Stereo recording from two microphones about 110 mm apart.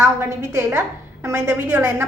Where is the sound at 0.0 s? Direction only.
25° right (ahead or behind).